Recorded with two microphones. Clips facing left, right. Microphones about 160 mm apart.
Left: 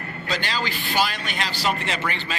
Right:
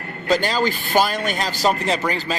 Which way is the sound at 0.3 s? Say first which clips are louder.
Right 9 dB; 45° right (ahead or behind).